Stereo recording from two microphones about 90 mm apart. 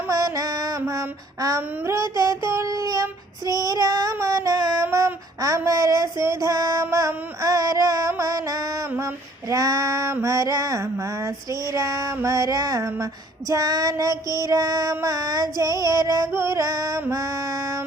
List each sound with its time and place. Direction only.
0.1 s music: 40° right (ahead or behind)
0.9 s child singing: 40° right (ahead or behind)
7.4 s a sound: 40° right (ahead or behind)
9.0 s female singing: 35° right (ahead or behind)
10.2 s child singing: 35° right (ahead or behind)
17.1 s female singing: 40° right (ahead or behind)